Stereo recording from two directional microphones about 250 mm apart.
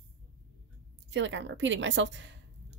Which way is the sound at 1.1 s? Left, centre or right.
Right.